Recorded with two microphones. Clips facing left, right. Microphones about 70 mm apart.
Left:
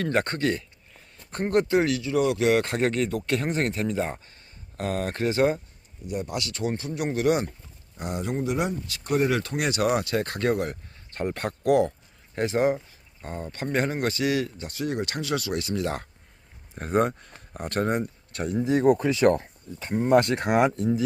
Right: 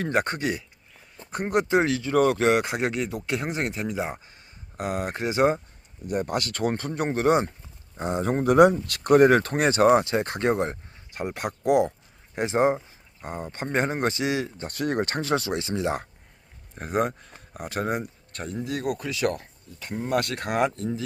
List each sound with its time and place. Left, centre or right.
0.0 s speech: centre; by 2.5 s right
2.5 s speech: centre
6.1 s speech: right
8.3 s speech: right
11.1 s speech: centre
14.7 s speech: right
16.7 s speech: centre
18.6 s speech: left